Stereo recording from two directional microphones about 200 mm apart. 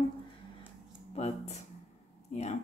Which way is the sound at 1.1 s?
30° left (ahead or behind).